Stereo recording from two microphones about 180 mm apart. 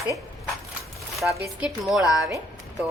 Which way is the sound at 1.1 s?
Centre (ahead or behind).